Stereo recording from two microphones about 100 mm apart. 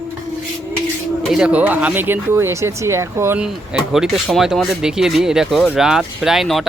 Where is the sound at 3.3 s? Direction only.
10° right (ahead or behind).